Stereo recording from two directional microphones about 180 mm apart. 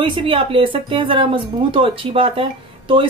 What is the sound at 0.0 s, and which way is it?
Speech, 30° right (ahead or behind).